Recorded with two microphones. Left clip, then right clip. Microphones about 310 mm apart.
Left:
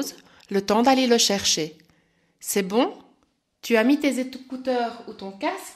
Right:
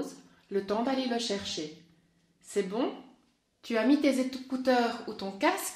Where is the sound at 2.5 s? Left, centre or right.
Left.